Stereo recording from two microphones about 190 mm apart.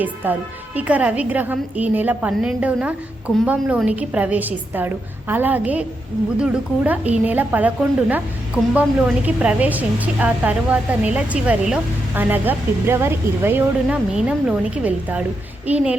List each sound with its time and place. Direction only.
0.2 s a woman's voice: 10° right (ahead or behind)